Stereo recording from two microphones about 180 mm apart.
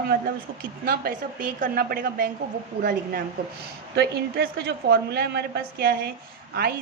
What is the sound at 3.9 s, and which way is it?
A woman's voice, 65° right (ahead or behind).